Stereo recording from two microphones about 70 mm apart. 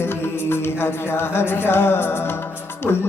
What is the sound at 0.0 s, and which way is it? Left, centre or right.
Music, left.